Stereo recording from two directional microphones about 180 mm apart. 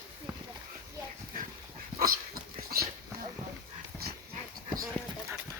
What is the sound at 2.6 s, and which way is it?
Dog, 55° right (ahead or behind).